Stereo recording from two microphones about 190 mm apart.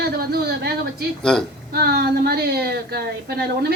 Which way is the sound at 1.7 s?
55° right (ahead or behind).